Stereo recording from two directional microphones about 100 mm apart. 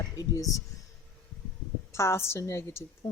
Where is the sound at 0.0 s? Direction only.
35° left (ahead or behind).